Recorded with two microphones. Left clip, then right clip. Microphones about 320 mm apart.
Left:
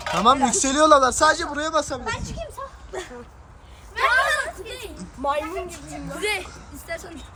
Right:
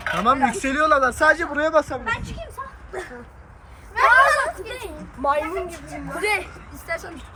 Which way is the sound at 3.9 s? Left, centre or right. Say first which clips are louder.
Right 5 dB; centre.